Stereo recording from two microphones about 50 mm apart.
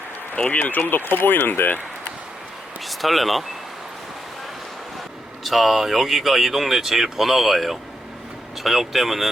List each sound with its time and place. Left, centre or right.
0.3 s speech: left
2.8 s speech: centre
5.4 s speech: centre